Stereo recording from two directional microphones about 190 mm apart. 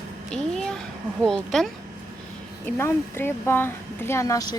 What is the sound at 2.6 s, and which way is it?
Speech, 10° left (ahead or behind).